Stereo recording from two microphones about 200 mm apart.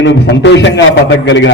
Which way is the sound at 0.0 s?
60° left (ahead or behind).